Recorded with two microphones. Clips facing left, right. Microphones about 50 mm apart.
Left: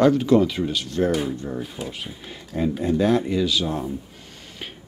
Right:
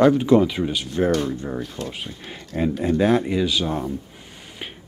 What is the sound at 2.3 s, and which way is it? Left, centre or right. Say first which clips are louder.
Speech: right 1 dB; right.